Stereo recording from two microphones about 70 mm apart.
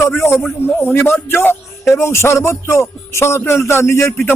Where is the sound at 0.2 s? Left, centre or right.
Left.